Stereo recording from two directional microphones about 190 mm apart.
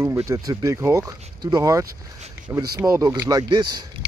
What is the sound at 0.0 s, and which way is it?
Speech, 15° right (ahead or behind).